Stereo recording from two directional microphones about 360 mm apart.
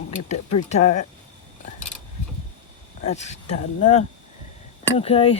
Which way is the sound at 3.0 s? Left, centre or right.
Centre.